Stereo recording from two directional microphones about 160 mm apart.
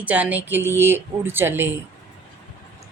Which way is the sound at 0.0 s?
10° right (ahead or behind).